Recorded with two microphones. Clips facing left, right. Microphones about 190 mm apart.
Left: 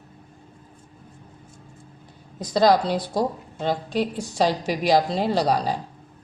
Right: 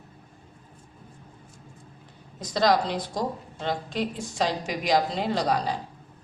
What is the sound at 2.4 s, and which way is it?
A woman's voice, 35° left (ahead or behind).